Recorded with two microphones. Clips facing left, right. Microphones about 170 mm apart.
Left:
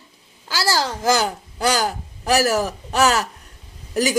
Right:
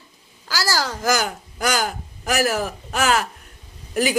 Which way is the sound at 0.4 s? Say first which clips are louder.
Left 2 dB; 25° left (ahead or behind).